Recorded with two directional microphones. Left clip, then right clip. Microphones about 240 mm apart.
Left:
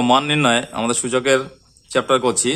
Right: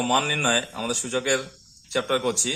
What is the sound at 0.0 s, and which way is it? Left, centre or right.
A man's voice, left.